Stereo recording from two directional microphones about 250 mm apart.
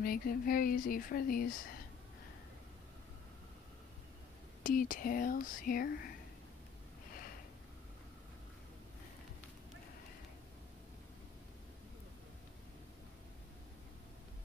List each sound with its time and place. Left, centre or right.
0.0 s speech: left
4.6 s speech: left